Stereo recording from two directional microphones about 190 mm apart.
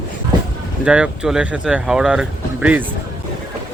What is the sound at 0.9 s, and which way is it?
Speech, 5° right (ahead or behind).